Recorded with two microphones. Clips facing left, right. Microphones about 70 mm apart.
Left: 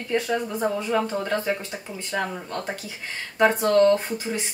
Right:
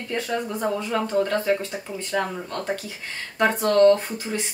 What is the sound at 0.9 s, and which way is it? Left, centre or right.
Speech, centre.